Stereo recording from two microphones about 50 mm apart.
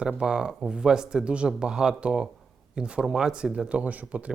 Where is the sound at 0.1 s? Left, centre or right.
Centre.